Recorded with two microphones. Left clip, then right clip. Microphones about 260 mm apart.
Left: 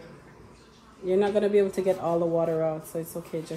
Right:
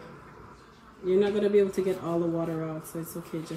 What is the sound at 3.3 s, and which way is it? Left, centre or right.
Speech, left.